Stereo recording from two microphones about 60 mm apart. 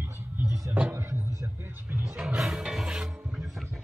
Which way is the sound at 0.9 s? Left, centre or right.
Right.